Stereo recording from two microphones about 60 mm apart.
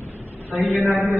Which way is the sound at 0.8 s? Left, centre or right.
Right.